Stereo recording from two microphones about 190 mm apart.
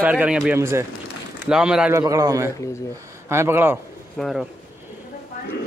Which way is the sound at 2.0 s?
20° right (ahead or behind).